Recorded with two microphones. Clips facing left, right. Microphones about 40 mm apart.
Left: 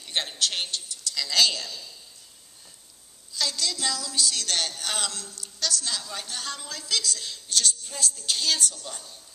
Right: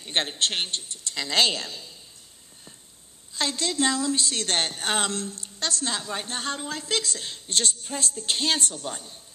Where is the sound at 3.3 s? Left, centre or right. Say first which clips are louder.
Right 3 dB; right.